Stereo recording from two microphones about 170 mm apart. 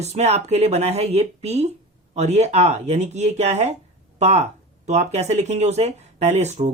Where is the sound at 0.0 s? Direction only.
40° right (ahead or behind).